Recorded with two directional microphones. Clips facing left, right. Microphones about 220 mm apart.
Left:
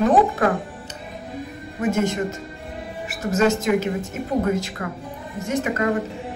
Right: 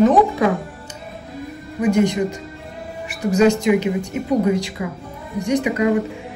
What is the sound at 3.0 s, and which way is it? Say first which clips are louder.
A woman's voice: right 4 dB; centre (ahead or behind).